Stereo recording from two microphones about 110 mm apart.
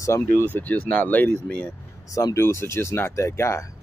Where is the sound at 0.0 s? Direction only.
25° left (ahead or behind).